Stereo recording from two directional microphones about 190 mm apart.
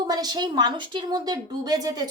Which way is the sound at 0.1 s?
20° right (ahead or behind).